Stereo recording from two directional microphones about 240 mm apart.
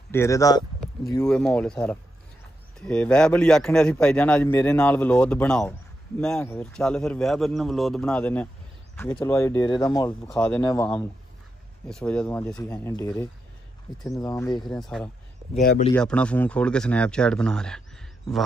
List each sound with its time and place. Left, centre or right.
0.1 s speech: centre
1.1 s a man's voice: centre
10.4 s a man's voice: centre
14.1 s speech: centre
14.8 s a man's voice: centre
15.5 s speech: left
15.9 s a man's voice: centre